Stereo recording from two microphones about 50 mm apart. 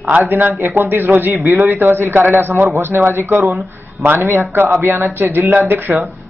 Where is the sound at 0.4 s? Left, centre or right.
Right.